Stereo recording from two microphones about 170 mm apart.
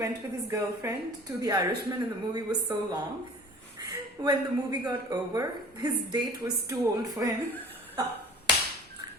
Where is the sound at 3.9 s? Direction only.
25° right (ahead or behind).